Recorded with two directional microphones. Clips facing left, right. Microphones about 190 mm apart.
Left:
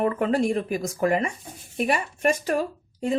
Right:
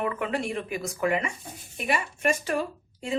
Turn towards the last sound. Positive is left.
turn(degrees=40)  # may be behind; listen again after turning